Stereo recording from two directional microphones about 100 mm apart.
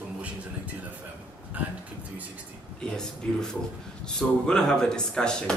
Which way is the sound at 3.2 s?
10° left (ahead or behind).